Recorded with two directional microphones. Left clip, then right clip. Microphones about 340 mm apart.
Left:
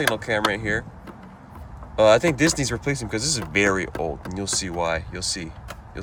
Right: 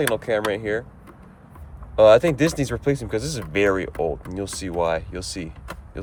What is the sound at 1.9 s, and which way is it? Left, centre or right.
Speech, centre.